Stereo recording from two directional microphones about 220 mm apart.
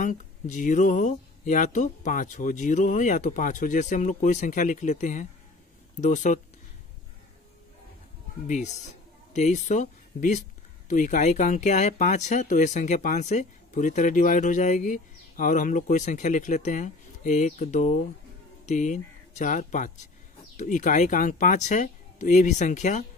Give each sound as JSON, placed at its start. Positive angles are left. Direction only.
{"t": 0.0, "sound": "speech", "side_deg": 35}
{"t": 8.5, "sound": "speech", "side_deg": 30}